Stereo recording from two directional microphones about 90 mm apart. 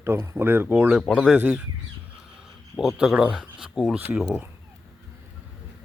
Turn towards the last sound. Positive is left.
turn(degrees=-15)  # may be behind; listen again after turning